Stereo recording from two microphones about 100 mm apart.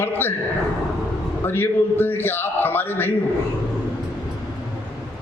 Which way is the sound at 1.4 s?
20° left (ahead or behind).